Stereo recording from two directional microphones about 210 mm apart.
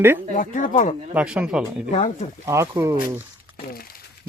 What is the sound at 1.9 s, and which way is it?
Speech, 35° left (ahead or behind).